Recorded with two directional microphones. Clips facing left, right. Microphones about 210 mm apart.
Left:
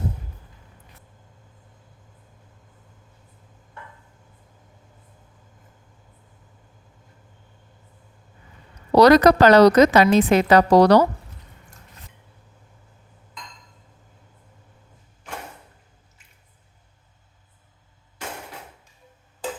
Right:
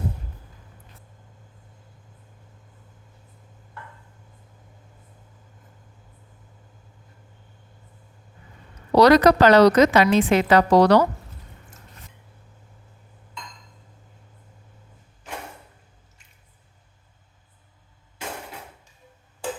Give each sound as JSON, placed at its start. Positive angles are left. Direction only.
{"t": 9.0, "sound": "a woman's voice", "side_deg": 45}